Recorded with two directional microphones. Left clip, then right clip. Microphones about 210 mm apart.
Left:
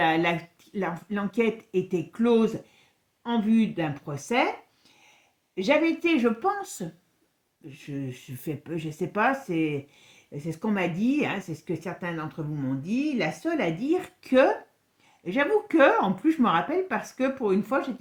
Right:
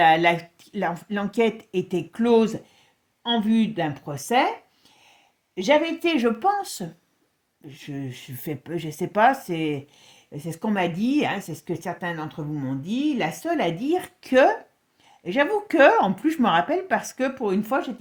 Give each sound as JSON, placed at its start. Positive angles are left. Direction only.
{"t": 0.0, "sound": "speech", "side_deg": -40}
{"t": 5.5, "sound": "speech", "side_deg": -40}